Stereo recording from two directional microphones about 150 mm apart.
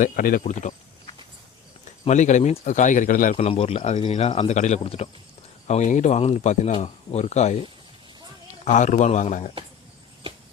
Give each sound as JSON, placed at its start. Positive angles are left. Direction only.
{"t": 0.0, "sound": "speech", "side_deg": 70}
{"t": 0.4, "sound": "speech", "side_deg": 50}
{"t": 2.0, "sound": "a man's voice", "side_deg": 55}
{"t": 3.4, "sound": "speech", "side_deg": 40}
{"t": 8.6, "sound": "speech", "side_deg": 55}